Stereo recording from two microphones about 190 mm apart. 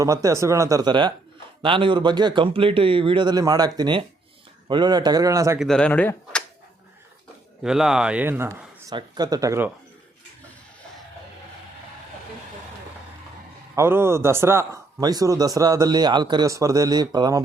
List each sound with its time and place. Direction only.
0.0 s speech: 15° right (ahead or behind)
5.5 s speech: 5° left (ahead or behind)
7.6 s speech: 5° right (ahead or behind)
13.7 s speech: 15° right (ahead or behind)